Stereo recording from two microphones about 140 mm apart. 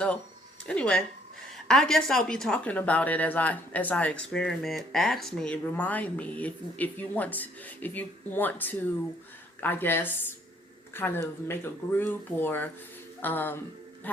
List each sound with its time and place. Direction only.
0.6 s a woman's voice: 5° left (ahead or behind)